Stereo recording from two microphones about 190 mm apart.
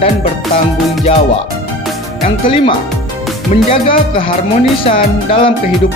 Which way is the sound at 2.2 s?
25° left (ahead or behind).